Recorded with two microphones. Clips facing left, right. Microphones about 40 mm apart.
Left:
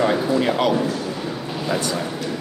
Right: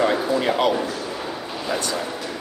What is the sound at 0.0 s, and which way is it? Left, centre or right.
A man's voice, centre.